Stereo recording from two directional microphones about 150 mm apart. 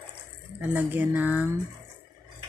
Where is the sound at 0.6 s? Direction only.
10° right (ahead or behind).